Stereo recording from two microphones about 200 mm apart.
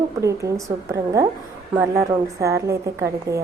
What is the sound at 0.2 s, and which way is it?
A woman's voice, 15° right (ahead or behind).